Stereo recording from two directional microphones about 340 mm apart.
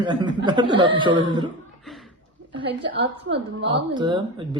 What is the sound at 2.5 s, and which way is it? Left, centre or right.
A man's voice, centre.